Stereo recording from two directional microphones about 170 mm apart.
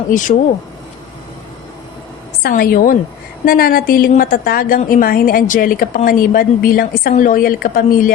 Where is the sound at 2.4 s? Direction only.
60° left (ahead or behind).